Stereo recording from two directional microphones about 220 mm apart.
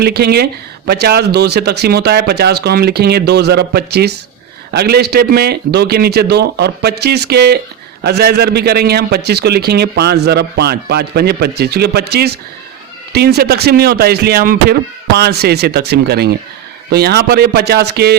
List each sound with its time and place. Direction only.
0.0 s a man's voice: 45° right (ahead or behind)